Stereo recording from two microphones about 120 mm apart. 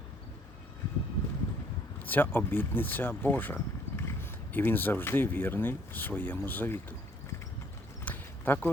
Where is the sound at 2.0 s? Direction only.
15° left (ahead or behind).